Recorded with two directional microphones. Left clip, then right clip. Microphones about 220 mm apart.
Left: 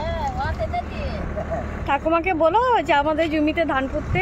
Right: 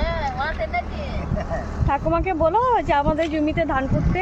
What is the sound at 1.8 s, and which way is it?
Speech, 5° left (ahead or behind).